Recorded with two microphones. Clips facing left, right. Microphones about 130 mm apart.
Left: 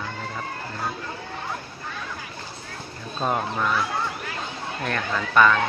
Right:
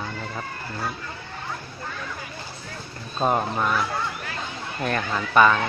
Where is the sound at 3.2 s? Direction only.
20° right (ahead or behind).